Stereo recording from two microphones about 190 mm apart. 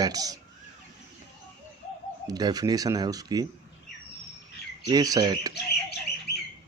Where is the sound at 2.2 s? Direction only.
20° right (ahead or behind).